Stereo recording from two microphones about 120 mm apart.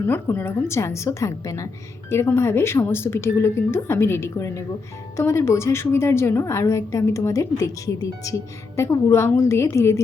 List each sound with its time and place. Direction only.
0.0 s a woman's voice: 15° left (ahead or behind)